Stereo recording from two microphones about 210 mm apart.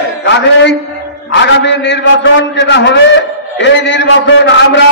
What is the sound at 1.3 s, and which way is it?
A man's voice, 55° left (ahead or behind).